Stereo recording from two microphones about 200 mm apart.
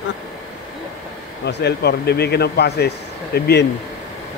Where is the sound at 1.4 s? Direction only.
55° left (ahead or behind).